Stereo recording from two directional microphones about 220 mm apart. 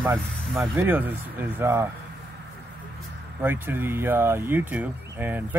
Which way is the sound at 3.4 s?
10° right (ahead or behind).